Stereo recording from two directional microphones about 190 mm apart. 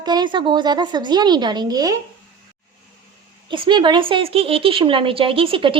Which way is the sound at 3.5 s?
25° right (ahead or behind).